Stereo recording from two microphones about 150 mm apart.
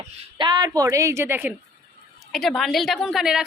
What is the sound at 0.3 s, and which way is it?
A woman's voice, 30° right (ahead or behind).